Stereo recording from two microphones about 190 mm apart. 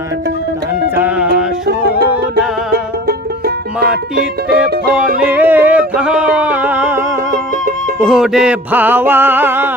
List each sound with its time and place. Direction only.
0.9 s music: 10° right (ahead or behind)
1.6 s music: 55° right (ahead or behind)
5.3 s music: 10° right (ahead or behind)